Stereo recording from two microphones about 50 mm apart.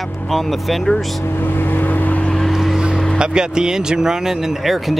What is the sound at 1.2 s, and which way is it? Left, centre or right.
Speech, left.